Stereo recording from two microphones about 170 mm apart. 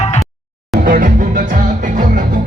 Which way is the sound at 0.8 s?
55° right (ahead or behind).